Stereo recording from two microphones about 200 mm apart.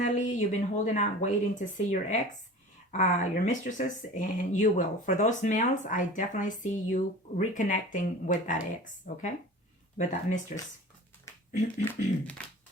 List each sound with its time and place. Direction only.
0.0 s speech: 35° left (ahead or behind)
11.9 s speech: 5° left (ahead or behind)